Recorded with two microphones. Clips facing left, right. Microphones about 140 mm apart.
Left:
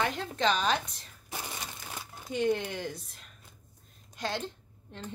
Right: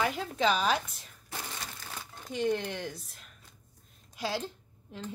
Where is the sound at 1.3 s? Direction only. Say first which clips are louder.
Left 1 dB; 15° left (ahead or behind).